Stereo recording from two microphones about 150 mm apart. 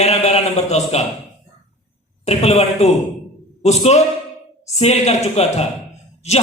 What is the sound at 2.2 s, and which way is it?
A man's voice, 45° left (ahead or behind).